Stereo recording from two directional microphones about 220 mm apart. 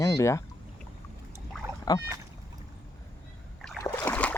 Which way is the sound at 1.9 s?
15° left (ahead or behind).